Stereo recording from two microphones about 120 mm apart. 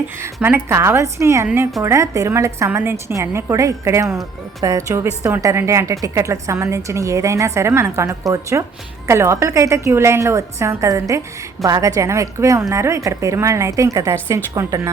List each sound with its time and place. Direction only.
0.4 s a woman's voice: 20° right (ahead or behind)